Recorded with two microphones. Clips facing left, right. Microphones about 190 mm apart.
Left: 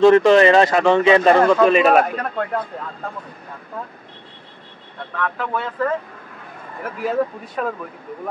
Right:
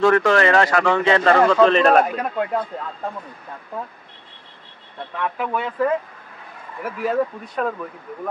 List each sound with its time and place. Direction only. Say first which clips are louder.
0.0 s speech: left 5 dB; 20° left (ahead or behind); by 2.1 s 5° left (ahead or behind)
5.1 s speech: even; 15° right (ahead or behind)
6.8 s speech: even; centre (ahead or behind)